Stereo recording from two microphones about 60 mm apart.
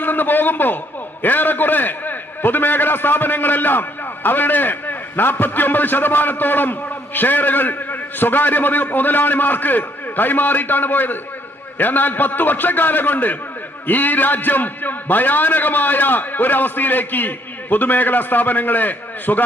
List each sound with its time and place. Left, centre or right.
0.0 s a man's voice: left